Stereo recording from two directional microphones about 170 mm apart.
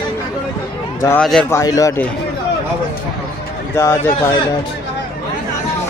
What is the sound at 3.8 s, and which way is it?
Speech, 15° left (ahead or behind).